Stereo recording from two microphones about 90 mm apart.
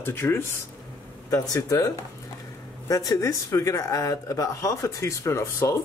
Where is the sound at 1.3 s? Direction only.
40° left (ahead or behind).